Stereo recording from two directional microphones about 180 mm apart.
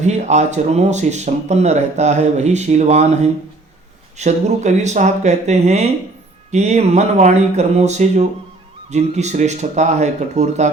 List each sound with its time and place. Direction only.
0.0 s speech: 40° right (ahead or behind)
4.2 s speech: 40° right (ahead or behind)